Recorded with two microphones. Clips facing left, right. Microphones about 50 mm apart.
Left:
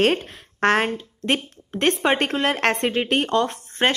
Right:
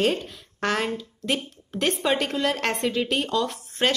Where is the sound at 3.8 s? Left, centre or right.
Left.